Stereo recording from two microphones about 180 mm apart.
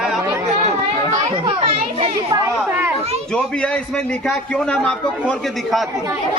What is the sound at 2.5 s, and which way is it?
Speech, 10° right (ahead or behind).